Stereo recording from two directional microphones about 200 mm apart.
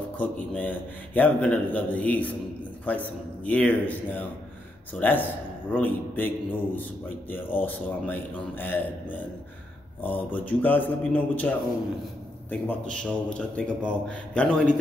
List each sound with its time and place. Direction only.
0.2 s a man's voice: 5° left (ahead or behind)
10.0 s a man's voice: 10° left (ahead or behind)